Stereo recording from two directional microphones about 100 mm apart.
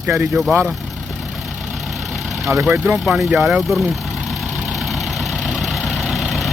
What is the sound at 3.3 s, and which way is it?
Speech, 5° right (ahead or behind).